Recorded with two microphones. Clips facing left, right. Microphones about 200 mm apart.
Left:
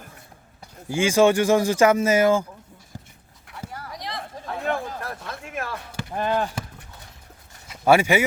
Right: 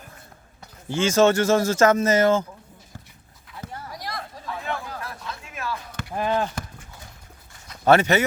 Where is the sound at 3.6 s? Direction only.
10° left (ahead or behind).